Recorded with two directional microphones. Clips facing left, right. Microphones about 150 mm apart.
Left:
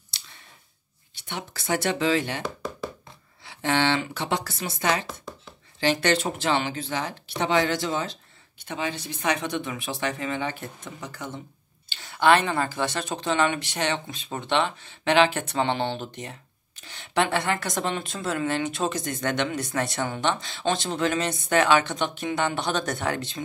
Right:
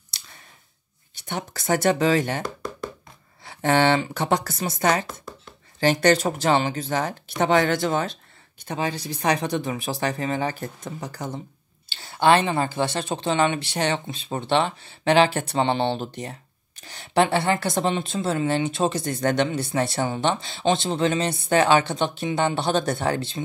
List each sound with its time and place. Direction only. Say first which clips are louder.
1.1 s speech: right 4 dB; 45° right (ahead or behind)
2.4 s knock: right 1 dB; centre (ahead or behind)
3.4 s speech: right 4 dB; 45° right (ahead or behind)
5.0 s chopping: even; centre (ahead or behind)
5.8 s speech: right 4 dB; 45° right (ahead or behind)
8.6 s speech: right 3 dB; 40° right (ahead or behind)